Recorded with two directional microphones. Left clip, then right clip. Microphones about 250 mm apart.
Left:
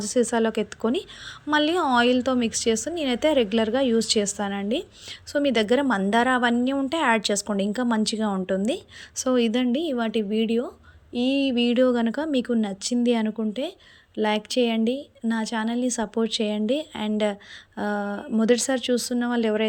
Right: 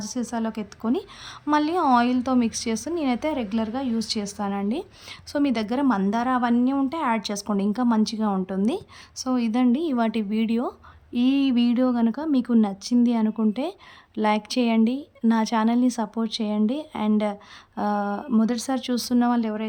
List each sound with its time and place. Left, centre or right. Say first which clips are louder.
0.0 s speech: left 7 dB; centre